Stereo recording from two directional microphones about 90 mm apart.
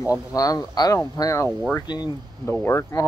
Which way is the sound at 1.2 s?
35° left (ahead or behind).